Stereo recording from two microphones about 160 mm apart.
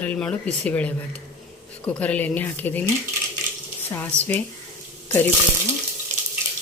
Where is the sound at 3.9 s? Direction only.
10° left (ahead or behind).